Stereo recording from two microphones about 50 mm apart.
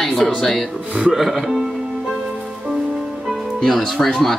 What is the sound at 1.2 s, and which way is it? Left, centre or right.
Speech, centre.